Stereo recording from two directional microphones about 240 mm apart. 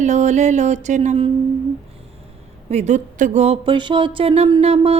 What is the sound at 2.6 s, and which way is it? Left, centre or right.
Speech, right.